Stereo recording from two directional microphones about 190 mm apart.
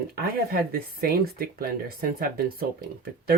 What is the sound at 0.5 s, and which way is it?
Speech, 50° right (ahead or behind).